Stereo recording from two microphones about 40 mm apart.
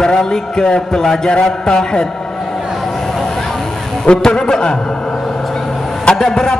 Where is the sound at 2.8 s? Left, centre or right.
Centre.